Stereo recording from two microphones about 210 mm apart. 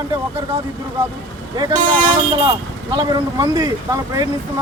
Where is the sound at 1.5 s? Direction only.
20° right (ahead or behind).